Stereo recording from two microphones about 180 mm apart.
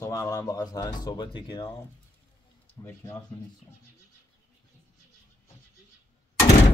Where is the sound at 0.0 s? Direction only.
15° left (ahead or behind).